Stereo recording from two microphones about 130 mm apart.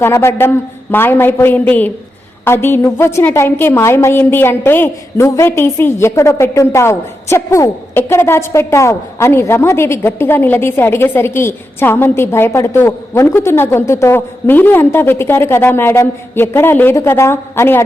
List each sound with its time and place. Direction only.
0.0 s a woman's voice: 20° left (ahead or behind)